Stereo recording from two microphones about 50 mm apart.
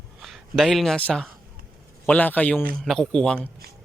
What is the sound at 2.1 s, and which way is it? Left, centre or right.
Speech, left.